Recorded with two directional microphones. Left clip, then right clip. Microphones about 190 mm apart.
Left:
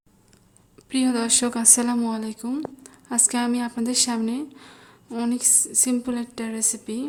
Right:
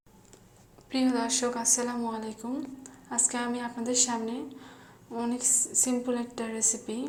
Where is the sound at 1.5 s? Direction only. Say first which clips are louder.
Left 6 dB; 55° left (ahead or behind).